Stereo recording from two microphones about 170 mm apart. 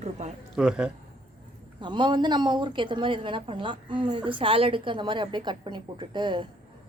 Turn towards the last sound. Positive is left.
turn(degrees=-25)  # may be behind; listen again after turning